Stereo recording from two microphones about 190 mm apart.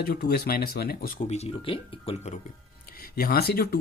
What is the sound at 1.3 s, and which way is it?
Speech, 30° left (ahead or behind).